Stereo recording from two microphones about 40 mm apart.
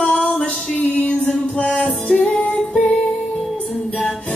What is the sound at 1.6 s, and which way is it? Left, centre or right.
Music, left.